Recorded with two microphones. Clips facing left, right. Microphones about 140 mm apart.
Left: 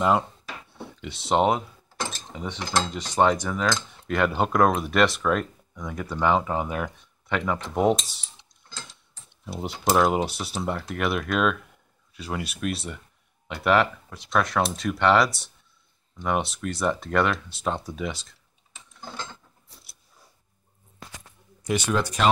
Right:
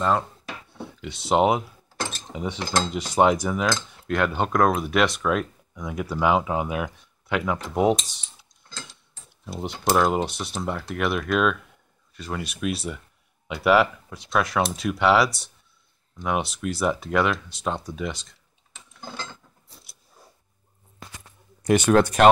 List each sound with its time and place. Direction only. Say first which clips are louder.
0.7 s speech: right 2 dB; centre (ahead or behind)
21.6 s speech: right 7 dB; 55° right (ahead or behind)